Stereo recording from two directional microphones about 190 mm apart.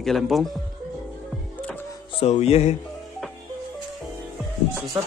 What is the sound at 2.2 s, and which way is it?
Music, 35° left (ahead or behind).